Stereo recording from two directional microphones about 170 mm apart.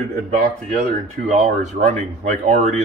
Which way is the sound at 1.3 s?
45° right (ahead or behind).